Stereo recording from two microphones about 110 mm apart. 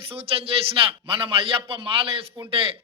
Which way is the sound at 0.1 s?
60° right (ahead or behind).